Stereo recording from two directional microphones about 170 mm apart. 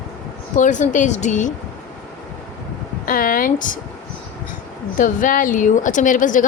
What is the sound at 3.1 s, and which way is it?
Speech, 55° left (ahead or behind).